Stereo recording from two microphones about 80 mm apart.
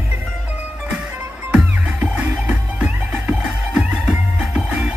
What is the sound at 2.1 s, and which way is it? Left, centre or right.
Music, centre.